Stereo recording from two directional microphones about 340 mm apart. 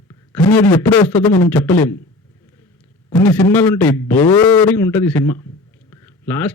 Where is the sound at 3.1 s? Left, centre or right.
Centre.